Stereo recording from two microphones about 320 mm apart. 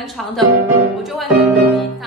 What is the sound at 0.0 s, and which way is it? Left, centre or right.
Speech, centre.